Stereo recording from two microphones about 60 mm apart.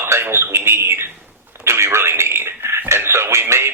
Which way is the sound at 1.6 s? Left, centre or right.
Right.